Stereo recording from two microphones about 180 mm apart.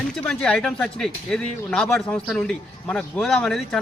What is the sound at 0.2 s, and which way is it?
Speech, 5° left (ahead or behind).